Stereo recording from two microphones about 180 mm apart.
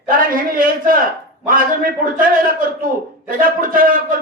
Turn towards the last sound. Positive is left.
turn(degrees=-50)  # may be behind; listen again after turning